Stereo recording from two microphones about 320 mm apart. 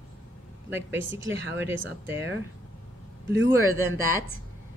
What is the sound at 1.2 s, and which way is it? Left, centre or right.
Speech, right.